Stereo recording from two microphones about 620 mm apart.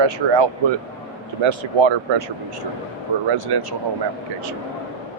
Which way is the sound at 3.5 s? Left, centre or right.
Right.